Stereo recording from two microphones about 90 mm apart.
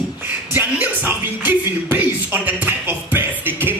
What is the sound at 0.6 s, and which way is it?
Music, 20° right (ahead or behind).